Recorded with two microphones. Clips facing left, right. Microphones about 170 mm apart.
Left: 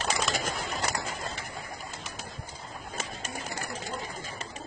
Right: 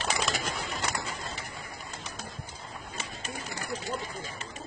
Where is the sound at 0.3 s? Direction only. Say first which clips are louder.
Left 1 dB; 45° left (ahead or behind).